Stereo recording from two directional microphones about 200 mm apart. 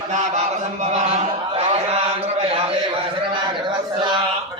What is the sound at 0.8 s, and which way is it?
Chant, 35° right (ahead or behind).